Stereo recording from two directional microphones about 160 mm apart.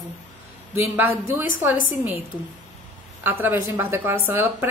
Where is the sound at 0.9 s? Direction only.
15° right (ahead or behind).